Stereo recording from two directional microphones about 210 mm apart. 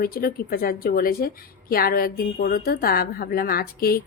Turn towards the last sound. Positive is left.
turn(degrees=45)  # may be behind; listen again after turning